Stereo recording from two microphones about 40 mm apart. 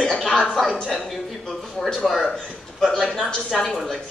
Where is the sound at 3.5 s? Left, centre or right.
Centre.